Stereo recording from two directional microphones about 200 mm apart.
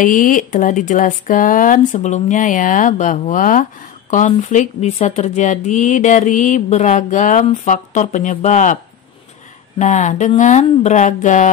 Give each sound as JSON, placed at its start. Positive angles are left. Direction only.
{"t": 0.0, "sound": "speech", "side_deg": 40}
{"t": 9.8, "sound": "speech", "side_deg": 35}